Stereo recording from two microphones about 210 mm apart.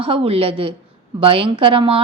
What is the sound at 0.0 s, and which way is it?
A woman's voice, 25° right (ahead or behind).